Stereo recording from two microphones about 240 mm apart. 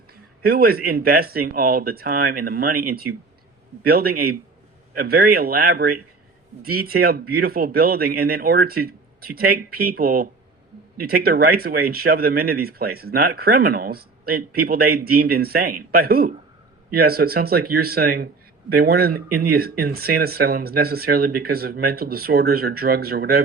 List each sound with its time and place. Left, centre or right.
0.1 s speech: right